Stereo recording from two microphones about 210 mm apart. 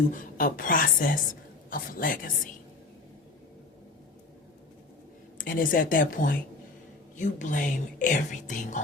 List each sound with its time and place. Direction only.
0.1 s speech: 40° left (ahead or behind)
5.4 s speech: 40° left (ahead or behind)